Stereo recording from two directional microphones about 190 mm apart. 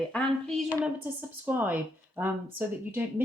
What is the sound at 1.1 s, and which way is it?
Speech, 10° right (ahead or behind).